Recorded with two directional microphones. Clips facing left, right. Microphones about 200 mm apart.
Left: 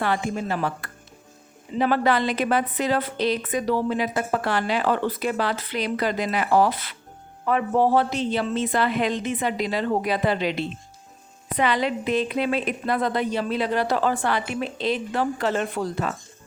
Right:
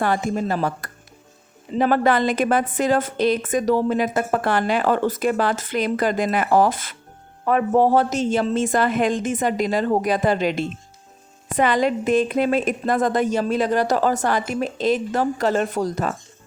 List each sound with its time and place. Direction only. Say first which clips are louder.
0.0 s a woman's voice: right 3 dB; 45° right (ahead or behind)